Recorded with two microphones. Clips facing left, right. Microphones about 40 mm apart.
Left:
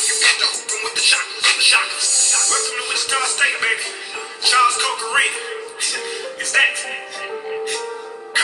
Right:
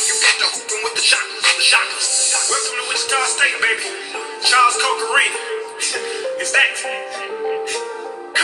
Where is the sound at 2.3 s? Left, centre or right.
Centre.